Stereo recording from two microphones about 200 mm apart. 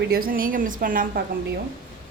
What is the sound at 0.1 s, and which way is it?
A woman's voice, 45° right (ahead or behind).